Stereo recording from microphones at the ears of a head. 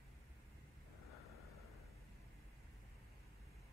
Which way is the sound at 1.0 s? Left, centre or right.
Left.